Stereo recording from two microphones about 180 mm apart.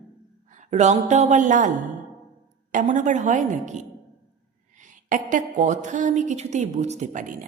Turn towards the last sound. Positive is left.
turn(degrees=-45)  # may be behind; listen again after turning